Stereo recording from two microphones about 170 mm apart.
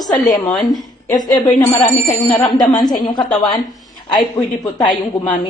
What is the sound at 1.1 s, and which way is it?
Speech, 25° left (ahead or behind).